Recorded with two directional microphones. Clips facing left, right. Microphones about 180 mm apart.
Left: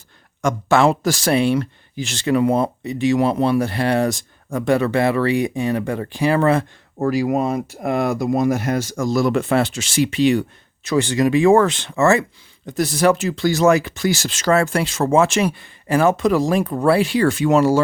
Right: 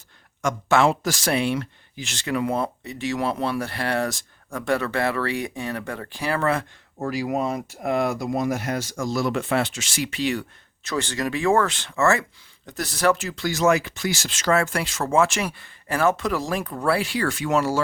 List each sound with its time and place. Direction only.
0.4 s speech: 35° left (ahead or behind)
7.1 s speech: 50° left (ahead or behind); by 17.7 s 20° left (ahead or behind)